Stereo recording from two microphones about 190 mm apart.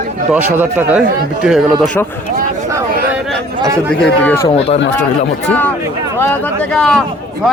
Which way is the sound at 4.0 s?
10° left (ahead or behind).